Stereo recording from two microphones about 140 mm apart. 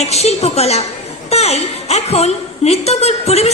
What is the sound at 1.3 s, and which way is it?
A woman's voice, 50° left (ahead or behind).